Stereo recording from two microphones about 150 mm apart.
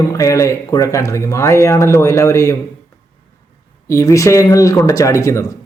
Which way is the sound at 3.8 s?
20° left (ahead or behind).